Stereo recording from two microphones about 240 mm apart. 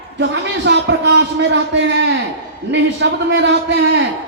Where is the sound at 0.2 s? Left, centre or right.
Right.